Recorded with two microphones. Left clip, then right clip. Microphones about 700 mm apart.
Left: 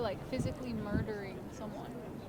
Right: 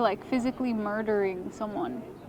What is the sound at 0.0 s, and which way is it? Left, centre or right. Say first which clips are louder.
A woman's voice: right 10 dB; right.